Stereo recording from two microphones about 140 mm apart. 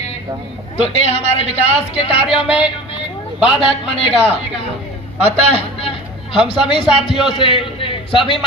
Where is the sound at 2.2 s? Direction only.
5° right (ahead or behind).